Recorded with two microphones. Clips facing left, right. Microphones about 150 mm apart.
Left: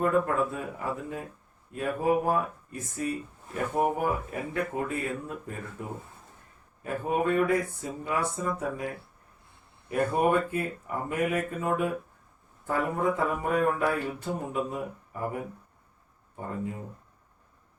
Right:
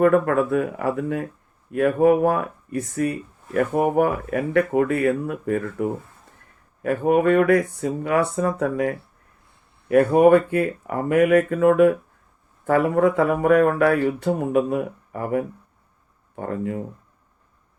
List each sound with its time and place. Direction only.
0.0 s speech: 75° right (ahead or behind)